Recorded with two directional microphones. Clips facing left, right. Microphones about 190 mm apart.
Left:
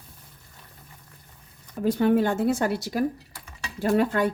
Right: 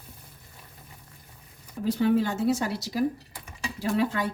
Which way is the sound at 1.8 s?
55° left (ahead or behind).